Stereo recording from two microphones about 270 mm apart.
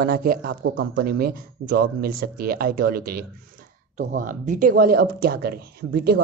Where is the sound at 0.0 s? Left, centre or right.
Right.